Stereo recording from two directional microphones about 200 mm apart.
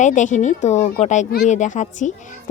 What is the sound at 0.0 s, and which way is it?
Speech, 40° left (ahead or behind).